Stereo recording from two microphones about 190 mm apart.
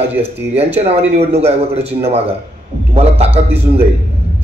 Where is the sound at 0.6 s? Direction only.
30° right (ahead or behind).